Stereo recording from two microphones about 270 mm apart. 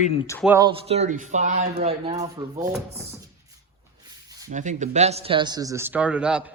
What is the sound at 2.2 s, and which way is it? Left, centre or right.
Speech, centre.